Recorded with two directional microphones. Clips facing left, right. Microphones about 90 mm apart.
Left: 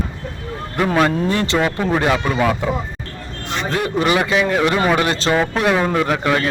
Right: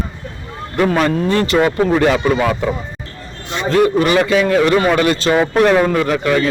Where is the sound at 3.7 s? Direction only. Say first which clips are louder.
Right 6 dB; 15° left (ahead or behind).